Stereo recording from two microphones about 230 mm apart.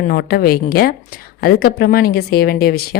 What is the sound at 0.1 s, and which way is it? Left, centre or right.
Speech, left.